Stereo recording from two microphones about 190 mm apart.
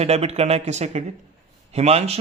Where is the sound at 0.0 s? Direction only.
35° right (ahead or behind).